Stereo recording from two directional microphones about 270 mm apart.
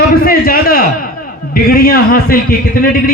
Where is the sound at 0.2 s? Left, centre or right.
Left.